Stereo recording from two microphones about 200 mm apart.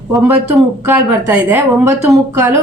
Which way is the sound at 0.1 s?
10° right (ahead or behind).